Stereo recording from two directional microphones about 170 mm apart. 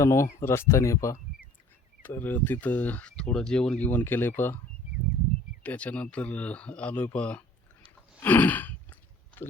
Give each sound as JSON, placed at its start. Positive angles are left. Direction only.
{"t": 0.0, "sound": "speech", "side_deg": 15}
{"t": 5.6, "sound": "speech", "side_deg": 10}
{"t": 8.2, "sound": "sigh", "side_deg": 10}